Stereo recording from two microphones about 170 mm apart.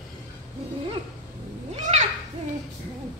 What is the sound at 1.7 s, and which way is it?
Children playing, 40° right (ahead or behind).